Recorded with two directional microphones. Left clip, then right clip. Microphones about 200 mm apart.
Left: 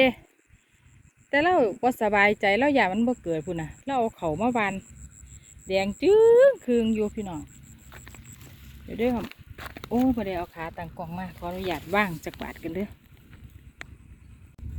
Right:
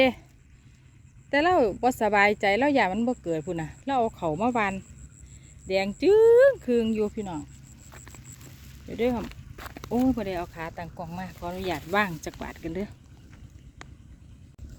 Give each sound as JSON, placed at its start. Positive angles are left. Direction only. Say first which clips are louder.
{"t": 1.3, "sound": "speech", "louder": "even", "side_deg": 0}
{"t": 7.9, "sound": "a sound", "louder": "left 1 dB", "side_deg": -10}
{"t": 8.9, "sound": "speech", "louder": "even", "side_deg": -5}
{"t": 13.8, "sound": "vehicle", "louder": "left 5 dB", "side_deg": 15}